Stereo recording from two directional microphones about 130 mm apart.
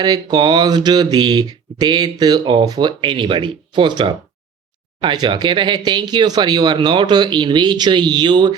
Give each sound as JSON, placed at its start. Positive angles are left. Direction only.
{"t": 0.0, "sound": "speech", "side_deg": -30}